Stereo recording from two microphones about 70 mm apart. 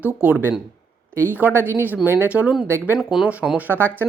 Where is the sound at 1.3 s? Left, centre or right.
Right.